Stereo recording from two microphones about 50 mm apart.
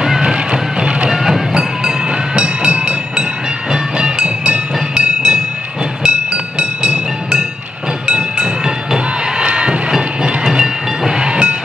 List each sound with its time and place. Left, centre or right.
0.0 s music: centre
1.1 s train: centre
8.2 s train: centre